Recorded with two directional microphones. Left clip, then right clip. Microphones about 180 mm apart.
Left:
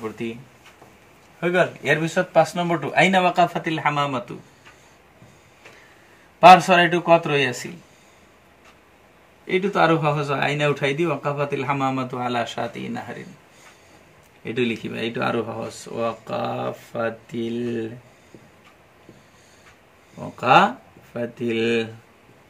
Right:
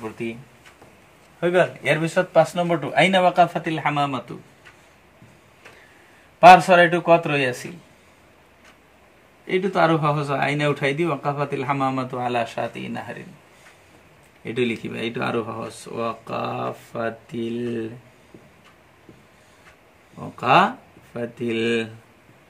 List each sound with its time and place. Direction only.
1.5 s speech: 30° right (ahead or behind)
2.5 s speech: 15° right (ahead or behind)
6.4 s speech: 10° right (ahead or behind)
9.5 s speech: 10° right (ahead or behind)
14.4 s speech: 10° right (ahead or behind)
20.3 s speech: 10° right (ahead or behind)